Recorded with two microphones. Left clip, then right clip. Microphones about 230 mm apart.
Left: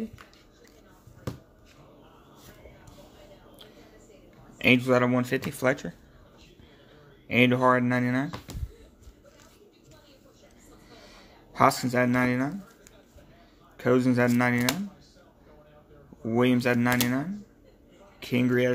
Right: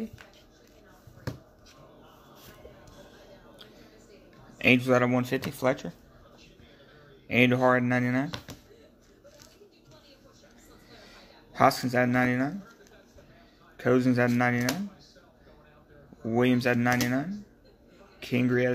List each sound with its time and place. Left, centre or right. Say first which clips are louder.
4.6 s speech: left 1 dB; centre
7.2 s speech: left 1 dB; centre
8.5 s a sound: left 1 dB; right
11.1 s speech: even; centre
13.7 s speech: left 1 dB; centre
16.3 s speech: left 1 dB; centre